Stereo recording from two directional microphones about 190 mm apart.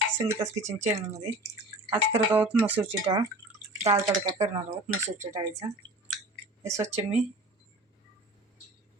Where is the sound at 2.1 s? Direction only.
10° right (ahead or behind).